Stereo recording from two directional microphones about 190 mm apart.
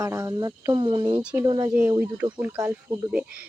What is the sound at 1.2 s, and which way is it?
Speech, 5° right (ahead or behind).